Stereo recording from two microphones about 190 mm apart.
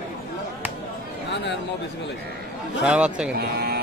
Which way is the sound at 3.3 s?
55° right (ahead or behind).